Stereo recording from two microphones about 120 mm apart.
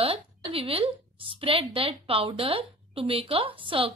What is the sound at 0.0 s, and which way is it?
A woman's voice, 50° right (ahead or behind).